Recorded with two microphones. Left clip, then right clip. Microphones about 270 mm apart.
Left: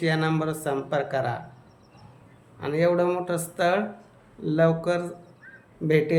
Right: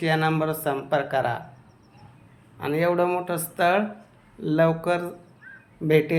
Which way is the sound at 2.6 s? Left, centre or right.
Centre.